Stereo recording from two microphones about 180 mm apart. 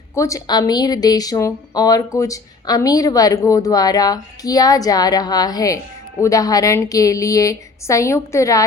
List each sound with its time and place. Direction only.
0.1 s speech: 15° left (ahead or behind)